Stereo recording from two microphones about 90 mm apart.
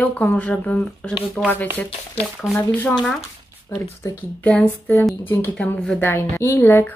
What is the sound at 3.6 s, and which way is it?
Speech, 30° left (ahead or behind).